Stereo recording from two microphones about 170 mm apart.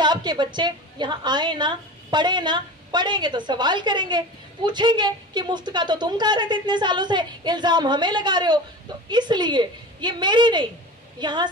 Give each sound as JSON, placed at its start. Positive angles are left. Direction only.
{"t": 0.0, "sound": "a woman's voice", "side_deg": -25}